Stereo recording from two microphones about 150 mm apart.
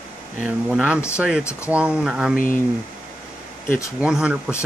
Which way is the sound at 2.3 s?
65° left (ahead or behind).